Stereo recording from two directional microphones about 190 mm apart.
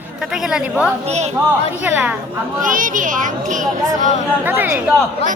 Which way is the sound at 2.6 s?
45° right (ahead or behind).